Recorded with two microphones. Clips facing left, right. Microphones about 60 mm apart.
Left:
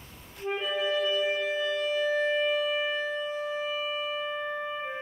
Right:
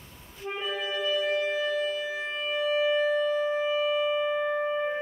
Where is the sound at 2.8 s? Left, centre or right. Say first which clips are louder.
Right 6 dB; centre; by 4.7 s right.